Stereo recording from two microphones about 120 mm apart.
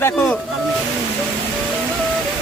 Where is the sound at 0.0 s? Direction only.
20° left (ahead or behind).